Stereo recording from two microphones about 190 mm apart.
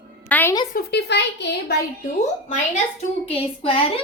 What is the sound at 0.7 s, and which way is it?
A child's voice, 60° left (ahead or behind).